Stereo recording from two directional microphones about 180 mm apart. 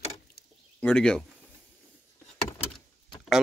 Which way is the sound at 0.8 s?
5° left (ahead or behind).